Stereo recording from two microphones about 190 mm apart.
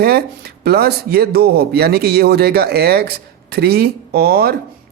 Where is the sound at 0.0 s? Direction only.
55° right (ahead or behind).